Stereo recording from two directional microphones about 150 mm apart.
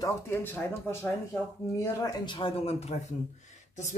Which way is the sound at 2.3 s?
40° left (ahead or behind).